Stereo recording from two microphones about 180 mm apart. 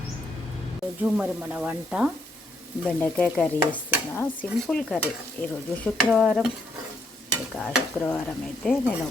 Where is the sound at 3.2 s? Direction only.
5° left (ahead or behind).